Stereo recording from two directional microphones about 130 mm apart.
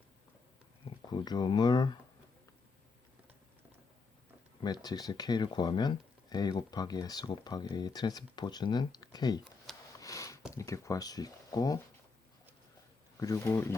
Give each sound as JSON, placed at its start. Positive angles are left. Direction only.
{"t": 1.1, "sound": "speech", "side_deg": 35}
{"t": 4.6, "sound": "speech", "side_deg": 30}
{"t": 10.0, "sound": "a sound", "side_deg": 25}
{"t": 10.5, "sound": "speech", "side_deg": 25}
{"t": 13.1, "sound": "speech", "side_deg": 25}